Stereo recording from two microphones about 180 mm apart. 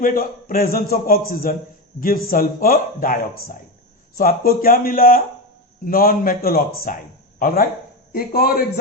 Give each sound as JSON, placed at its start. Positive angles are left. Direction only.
{"t": 0.0, "sound": "a man's voice", "side_deg": 55}